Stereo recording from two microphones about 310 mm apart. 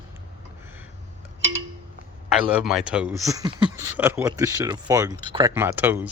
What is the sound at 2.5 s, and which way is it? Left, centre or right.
Speech, centre.